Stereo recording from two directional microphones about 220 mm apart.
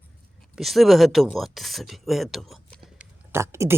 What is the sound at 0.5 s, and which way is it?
Speech, centre (ahead or behind).